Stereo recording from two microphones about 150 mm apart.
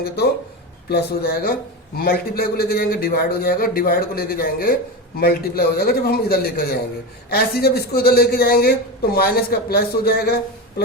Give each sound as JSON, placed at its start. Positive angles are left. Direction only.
{"t": 0.9, "sound": "a man's voice", "side_deg": 90}
{"t": 5.2, "sound": "a man's voice", "side_deg": 90}